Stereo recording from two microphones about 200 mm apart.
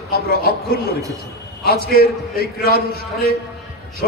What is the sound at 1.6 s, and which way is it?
A man's voice, 50° left (ahead or behind).